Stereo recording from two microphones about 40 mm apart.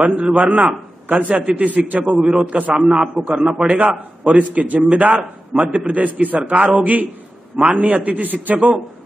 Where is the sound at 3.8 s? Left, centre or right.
Right.